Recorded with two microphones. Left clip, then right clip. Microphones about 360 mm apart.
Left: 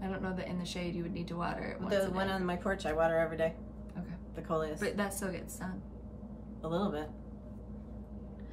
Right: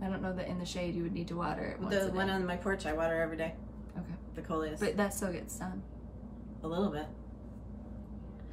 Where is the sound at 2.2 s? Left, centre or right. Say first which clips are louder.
Even; centre.